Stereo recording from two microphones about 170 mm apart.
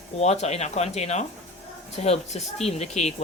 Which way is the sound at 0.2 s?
40° left (ahead or behind).